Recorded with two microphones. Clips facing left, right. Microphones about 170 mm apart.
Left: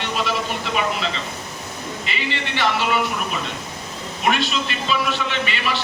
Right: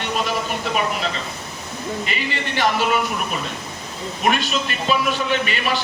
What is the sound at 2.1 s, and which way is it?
Speech, 45° right (ahead or behind).